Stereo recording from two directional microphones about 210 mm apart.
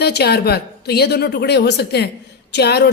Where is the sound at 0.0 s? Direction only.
50° left (ahead or behind).